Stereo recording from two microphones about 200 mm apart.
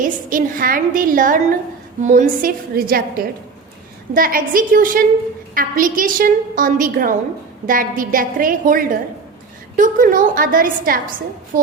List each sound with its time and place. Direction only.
0.0 s a woman's voice: 40° right (ahead or behind)